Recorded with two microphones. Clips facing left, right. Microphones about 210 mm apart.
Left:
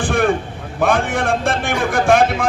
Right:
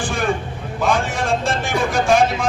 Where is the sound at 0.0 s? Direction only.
60° left (ahead or behind).